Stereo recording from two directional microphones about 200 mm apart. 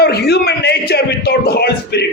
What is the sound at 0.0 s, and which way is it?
A man's voice, 55° left (ahead or behind).